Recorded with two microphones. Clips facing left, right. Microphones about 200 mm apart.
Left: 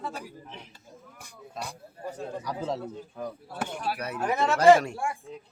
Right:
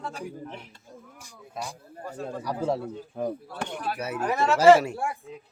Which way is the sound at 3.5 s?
5° left (ahead or behind).